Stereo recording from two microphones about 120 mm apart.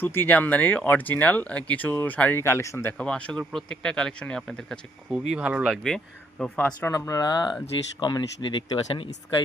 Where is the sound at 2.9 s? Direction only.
5° left (ahead or behind).